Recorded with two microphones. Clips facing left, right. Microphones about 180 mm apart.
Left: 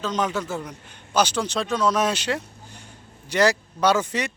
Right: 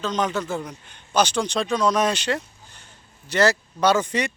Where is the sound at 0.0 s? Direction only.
10° left (ahead or behind).